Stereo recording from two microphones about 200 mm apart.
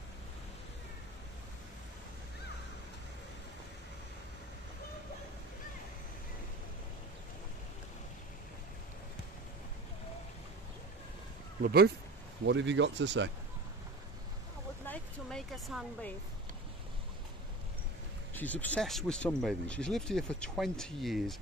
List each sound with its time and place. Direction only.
11.6 s speech: 50° right (ahead or behind)
12.4 s speech: 65° right (ahead or behind)
14.9 s speech: centre (ahead or behind)
18.3 s speech: 10° left (ahead or behind)